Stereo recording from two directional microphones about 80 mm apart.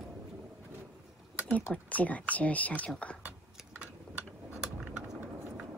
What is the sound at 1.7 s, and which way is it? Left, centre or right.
Speech, centre.